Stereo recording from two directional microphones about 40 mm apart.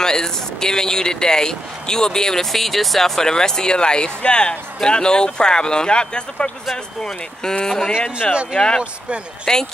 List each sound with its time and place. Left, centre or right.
0.0 s speech: centre
3.2 s speech: centre
9.5 s speech: centre